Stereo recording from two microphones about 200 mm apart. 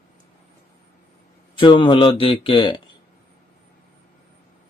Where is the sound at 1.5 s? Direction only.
25° left (ahead or behind).